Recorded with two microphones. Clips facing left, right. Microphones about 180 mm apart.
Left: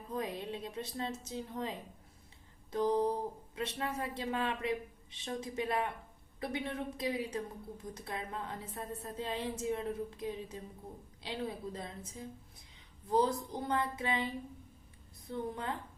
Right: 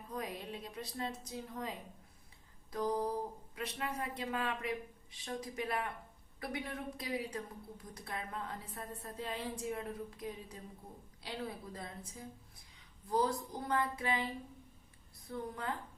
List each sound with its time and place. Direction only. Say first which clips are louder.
0.1 s a woman's voice: left 4 dB; 25° left (ahead or behind)
2.7 s a woman's voice: left 4 dB; 25° left (ahead or behind)
15.3 s a woman's voice: left 3 dB; 20° left (ahead or behind)